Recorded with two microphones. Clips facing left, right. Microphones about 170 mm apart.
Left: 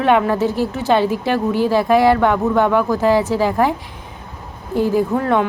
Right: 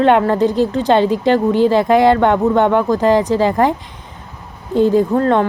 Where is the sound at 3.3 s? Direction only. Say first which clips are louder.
Right 3 dB; 10° left (ahead or behind).